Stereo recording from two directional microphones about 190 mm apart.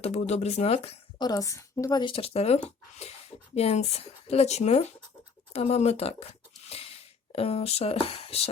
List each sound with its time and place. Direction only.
0.0 s a woman's voice: 35° left (ahead or behind)
1.2 s a woman's voice: 20° left (ahead or behind)
6.7 s a sound: 30° left (ahead or behind)
7.3 s a woman's voice: 30° left (ahead or behind)